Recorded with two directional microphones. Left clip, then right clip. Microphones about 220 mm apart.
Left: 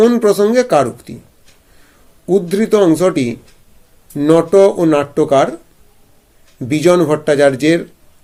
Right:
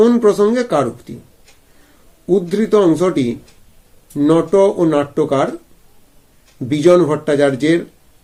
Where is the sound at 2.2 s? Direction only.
30° left (ahead or behind).